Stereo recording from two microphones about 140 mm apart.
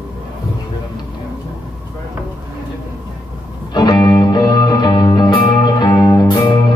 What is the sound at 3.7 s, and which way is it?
Music, 30° left (ahead or behind).